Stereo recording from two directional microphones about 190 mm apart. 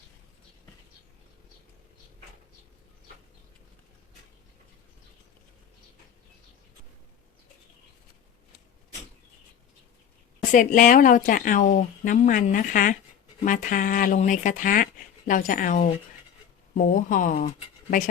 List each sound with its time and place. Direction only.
10.5 s speech: 45° left (ahead or behind)